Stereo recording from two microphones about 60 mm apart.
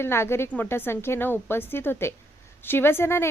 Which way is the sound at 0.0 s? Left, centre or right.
Left.